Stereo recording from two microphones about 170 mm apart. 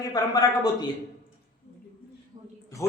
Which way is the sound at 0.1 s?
25° left (ahead or behind).